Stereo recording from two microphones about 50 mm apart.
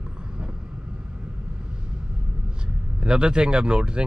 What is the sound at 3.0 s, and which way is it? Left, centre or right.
Speech, centre.